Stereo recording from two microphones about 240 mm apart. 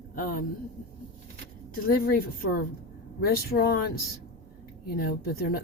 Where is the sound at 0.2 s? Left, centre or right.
Left.